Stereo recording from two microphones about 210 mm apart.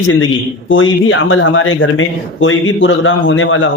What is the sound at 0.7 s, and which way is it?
A man's voice, 70° left (ahead or behind).